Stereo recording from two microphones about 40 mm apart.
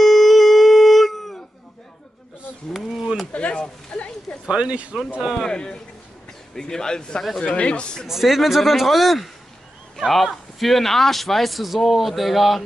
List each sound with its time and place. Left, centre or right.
0.0 s howl: centre
2.7 s a sound: centre
3.3 s a sound: left
4.5 s speech: right
5.4 s speech: centre
8.1 s speech: centre